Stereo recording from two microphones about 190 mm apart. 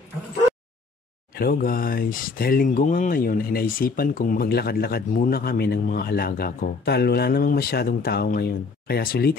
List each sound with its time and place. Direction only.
1.3 s speech: 50° left (ahead or behind)